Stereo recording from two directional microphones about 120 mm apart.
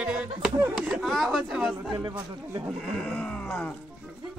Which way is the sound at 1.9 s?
35° right (ahead or behind).